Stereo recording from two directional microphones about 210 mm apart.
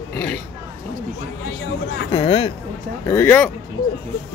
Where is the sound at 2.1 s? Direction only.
25° left (ahead or behind).